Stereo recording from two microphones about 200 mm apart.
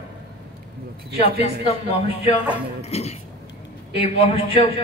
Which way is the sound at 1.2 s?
30° left (ahead or behind).